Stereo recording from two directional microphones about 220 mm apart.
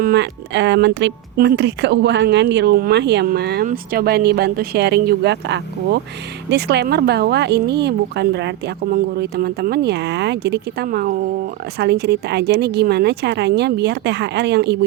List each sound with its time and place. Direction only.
0.0 s speech: 50° right (ahead or behind)